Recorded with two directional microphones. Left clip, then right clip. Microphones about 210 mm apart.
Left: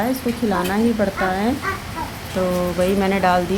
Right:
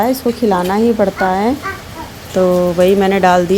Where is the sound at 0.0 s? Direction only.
30° right (ahead or behind).